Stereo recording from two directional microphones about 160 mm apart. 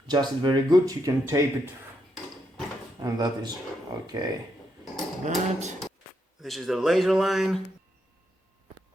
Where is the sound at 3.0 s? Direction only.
25° right (ahead or behind).